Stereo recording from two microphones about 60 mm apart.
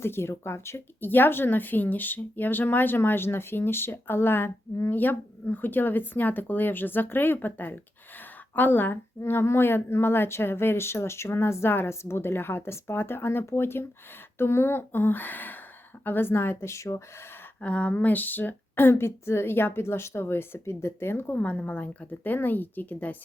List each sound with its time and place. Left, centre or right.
0.0 s speech: left
1.1 s speech: left
17.6 s speech: left
21.3 s a woman's voice: left